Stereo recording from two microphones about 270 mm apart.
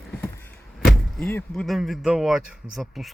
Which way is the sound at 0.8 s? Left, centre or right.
Centre.